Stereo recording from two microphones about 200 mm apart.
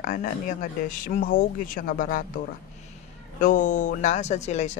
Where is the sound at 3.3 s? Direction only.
40° left (ahead or behind).